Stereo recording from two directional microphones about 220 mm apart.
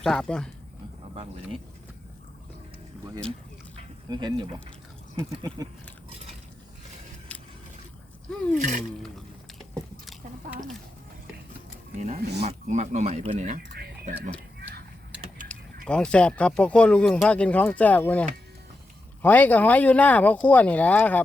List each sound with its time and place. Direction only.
0.0 s speech: centre (ahead or behind)
4.1 s speech: 20° right (ahead or behind)
10.1 s a sound: centre (ahead or behind)
11.9 s speech: 30° right (ahead or behind)
13.6 s a sound: 45° right (ahead or behind)
15.4 s speech: 5° left (ahead or behind)